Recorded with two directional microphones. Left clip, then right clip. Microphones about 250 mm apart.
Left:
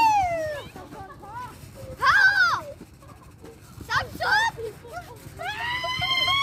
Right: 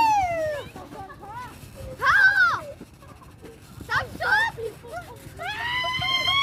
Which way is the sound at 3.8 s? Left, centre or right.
Left.